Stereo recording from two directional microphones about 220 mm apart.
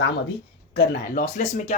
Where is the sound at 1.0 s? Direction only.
35° left (ahead or behind).